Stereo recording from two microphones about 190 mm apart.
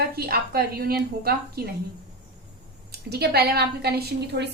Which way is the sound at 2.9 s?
55° right (ahead or behind).